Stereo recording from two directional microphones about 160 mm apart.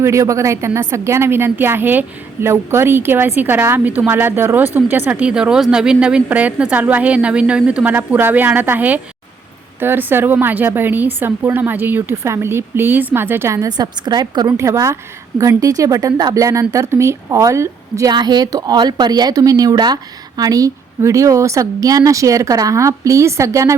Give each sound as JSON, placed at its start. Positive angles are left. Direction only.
{"t": 0.0, "sound": "a woman's voice", "side_deg": -20}